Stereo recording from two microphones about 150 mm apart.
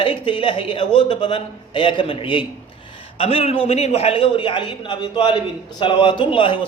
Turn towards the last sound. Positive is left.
turn(degrees=35)  # may be behind; listen again after turning